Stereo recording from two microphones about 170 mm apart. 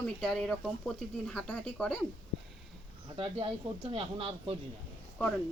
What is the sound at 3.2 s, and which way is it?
Speech, 30° right (ahead or behind).